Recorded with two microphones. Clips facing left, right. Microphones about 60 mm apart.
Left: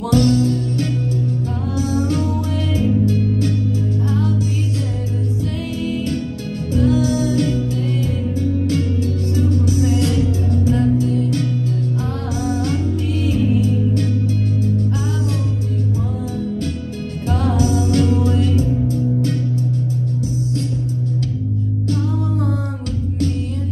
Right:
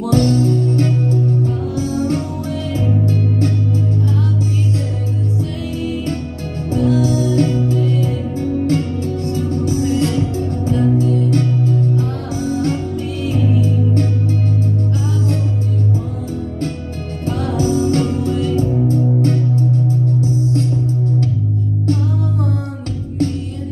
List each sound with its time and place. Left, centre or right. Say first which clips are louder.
0.1 s music: even; right
6.7 s music: right 1 dB; right
9.9 s music: right 1 dB; right
13.3 s music: right 1 dB; right
17.6 s music: right 3 dB; right